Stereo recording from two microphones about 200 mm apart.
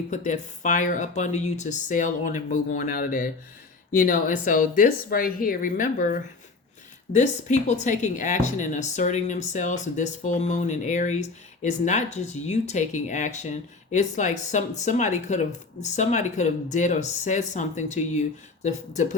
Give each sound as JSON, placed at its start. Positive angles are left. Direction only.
{"t": 0.1, "sound": "a woman's voice", "side_deg": 40}